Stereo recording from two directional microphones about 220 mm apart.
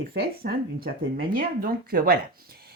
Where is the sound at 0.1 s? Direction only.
45° right (ahead or behind).